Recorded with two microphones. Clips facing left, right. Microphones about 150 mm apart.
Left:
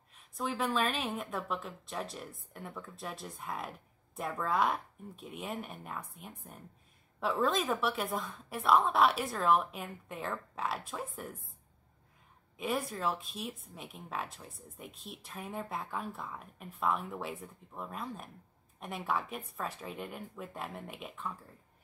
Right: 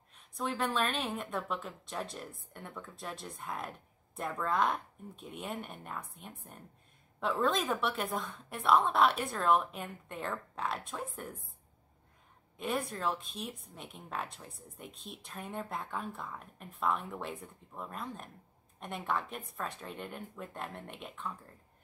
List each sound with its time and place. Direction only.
0.1 s a woman's voice: centre (ahead or behind)
12.5 s a woman's voice: centre (ahead or behind)